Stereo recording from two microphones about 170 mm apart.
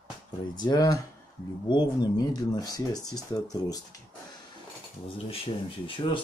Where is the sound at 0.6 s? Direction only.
25° left (ahead or behind).